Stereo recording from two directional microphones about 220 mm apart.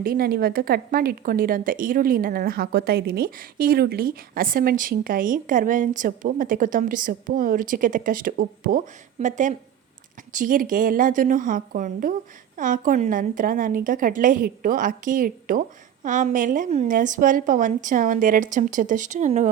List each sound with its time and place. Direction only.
0.0 s a woman's voice: 45° right (ahead or behind)